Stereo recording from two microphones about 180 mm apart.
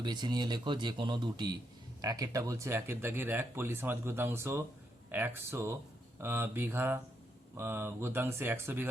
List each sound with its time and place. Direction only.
0.0 s speech: 25° right (ahead or behind)